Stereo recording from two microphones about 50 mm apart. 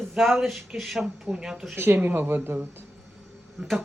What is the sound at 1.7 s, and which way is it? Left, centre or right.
Speech, right.